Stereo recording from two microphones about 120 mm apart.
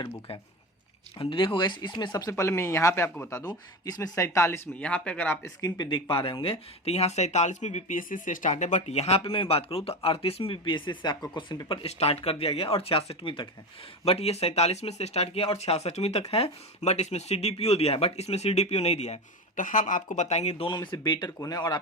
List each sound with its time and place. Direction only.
1.2 s speech: 45° left (ahead or behind); by 5.5 s 15° left (ahead or behind)
5.6 s speech: 35° left (ahead or behind)